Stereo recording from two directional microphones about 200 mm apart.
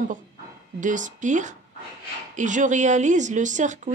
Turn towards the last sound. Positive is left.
turn(degrees=-35)  # may be behind; listen again after turning